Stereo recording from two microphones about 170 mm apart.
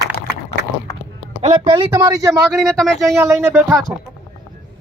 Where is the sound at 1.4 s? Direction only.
30° right (ahead or behind).